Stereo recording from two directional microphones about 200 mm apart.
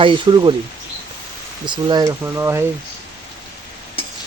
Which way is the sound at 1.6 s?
20° right (ahead or behind).